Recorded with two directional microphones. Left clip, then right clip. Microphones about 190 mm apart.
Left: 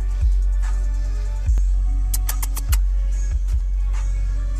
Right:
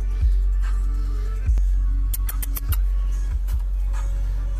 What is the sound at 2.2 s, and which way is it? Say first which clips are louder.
Music: left 4 dB; 20° right (ahead or behind).